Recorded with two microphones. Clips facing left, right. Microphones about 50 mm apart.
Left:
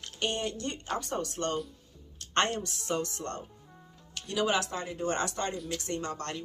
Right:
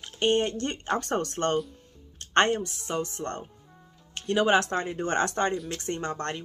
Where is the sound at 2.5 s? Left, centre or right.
Centre.